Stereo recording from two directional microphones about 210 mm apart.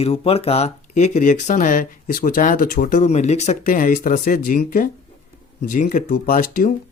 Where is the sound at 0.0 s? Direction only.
30° left (ahead or behind).